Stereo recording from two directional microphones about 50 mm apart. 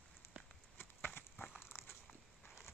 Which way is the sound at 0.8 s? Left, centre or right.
Left.